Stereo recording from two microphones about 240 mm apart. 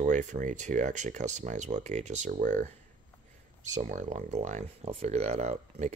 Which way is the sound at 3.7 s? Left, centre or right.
Right.